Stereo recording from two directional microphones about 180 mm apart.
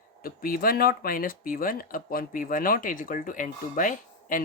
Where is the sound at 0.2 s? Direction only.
55° left (ahead or behind).